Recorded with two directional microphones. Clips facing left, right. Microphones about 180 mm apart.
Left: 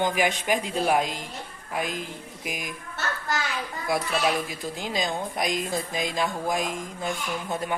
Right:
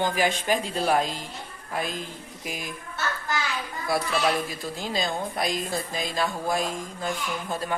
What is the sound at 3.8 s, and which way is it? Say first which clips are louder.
A woman's voice: even; 15° left (ahead or behind).